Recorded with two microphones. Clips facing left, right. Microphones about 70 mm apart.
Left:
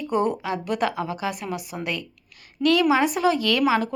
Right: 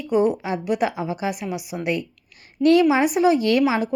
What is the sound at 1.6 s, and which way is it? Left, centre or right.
Speech, left.